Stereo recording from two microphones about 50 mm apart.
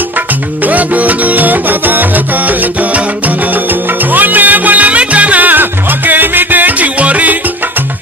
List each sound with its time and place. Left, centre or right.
0.7 s music: right
4.1 s music: right